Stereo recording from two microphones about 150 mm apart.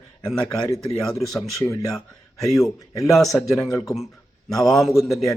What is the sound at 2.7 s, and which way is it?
Speech, 20° left (ahead or behind).